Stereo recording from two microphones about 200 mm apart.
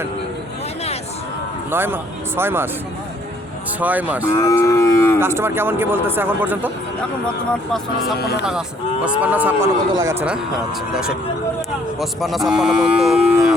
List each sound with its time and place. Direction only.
1.7 s a man's voice: 10° right (ahead or behind)
3.8 s a man's voice: 10° right (ahead or behind)
4.3 s cattle: 15° left (ahead or behind)
5.2 s a man's voice: 10° right (ahead or behind)
7.5 s cattle: centre (ahead or behind)
8.2 s speech: 50° left (ahead or behind)
9.0 s a man's voice: 10° right (ahead or behind)
10.9 s cattle: 5° right (ahead or behind)